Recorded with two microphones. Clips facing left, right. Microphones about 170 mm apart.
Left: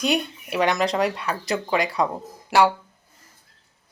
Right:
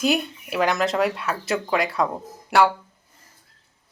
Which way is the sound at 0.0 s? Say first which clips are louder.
Right 1 dB; centre (ahead or behind).